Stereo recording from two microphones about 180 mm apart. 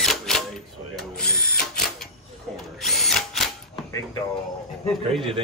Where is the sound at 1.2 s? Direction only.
60° left (ahead or behind).